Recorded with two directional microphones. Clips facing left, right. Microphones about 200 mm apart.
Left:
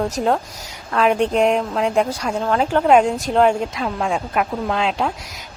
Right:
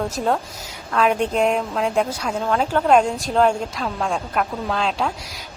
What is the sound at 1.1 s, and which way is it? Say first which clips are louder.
A woman's voice: left 3 dB; centre (ahead or behind).